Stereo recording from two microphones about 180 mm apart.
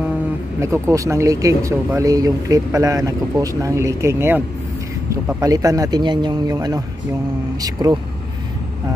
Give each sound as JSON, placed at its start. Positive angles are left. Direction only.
{"t": 0.6, "sound": "speech", "side_deg": -15}